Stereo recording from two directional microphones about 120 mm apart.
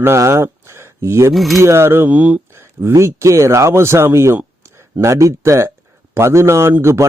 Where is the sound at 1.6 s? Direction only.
20° right (ahead or behind).